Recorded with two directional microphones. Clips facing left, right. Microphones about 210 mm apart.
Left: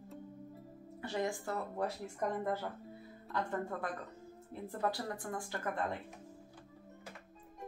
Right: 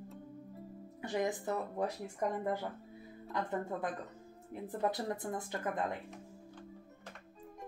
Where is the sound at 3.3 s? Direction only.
20° right (ahead or behind).